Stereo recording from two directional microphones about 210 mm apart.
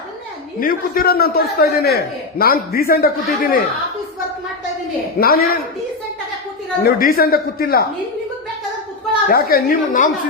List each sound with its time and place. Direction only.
0.6 s a man's voice: 45° left (ahead or behind)
5.2 s a man's voice: 45° left (ahead or behind)
6.8 s a man's voice: 45° left (ahead or behind)
9.3 s a man's voice: 45° left (ahead or behind)